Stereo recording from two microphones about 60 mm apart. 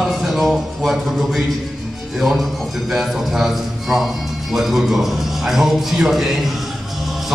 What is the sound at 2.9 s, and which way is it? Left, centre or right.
A man's voice, centre.